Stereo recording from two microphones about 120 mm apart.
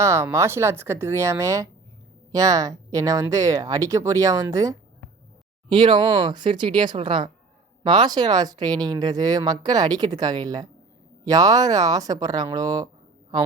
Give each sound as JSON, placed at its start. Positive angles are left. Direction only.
{"t": 0.0, "sound": "speech", "side_deg": -25}
{"t": 5.6, "sound": "speech", "side_deg": -40}